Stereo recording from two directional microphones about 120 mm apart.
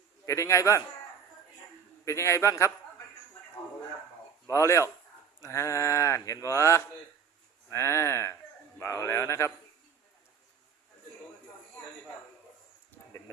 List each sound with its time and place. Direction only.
0.3 s speech: 25° left (ahead or behind)
2.0 s speech: 25° left (ahead or behind)
4.4 s speech: 25° left (ahead or behind)